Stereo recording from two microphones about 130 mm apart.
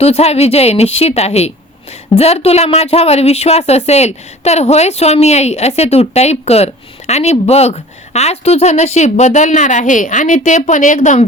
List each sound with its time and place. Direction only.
0.0 s a woman's voice: 55° left (ahead or behind); by 11.3 s 70° left (ahead or behind)